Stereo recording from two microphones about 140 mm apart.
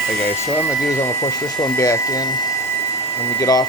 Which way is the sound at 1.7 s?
20° left (ahead or behind).